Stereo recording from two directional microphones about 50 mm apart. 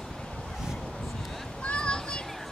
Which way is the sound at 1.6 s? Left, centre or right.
Left.